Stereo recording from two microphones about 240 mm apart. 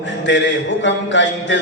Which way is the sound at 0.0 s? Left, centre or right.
Left.